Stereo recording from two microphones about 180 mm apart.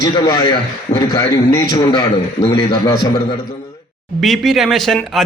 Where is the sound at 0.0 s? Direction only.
25° left (ahead or behind).